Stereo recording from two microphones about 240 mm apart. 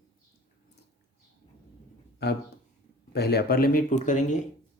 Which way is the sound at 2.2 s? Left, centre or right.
Left.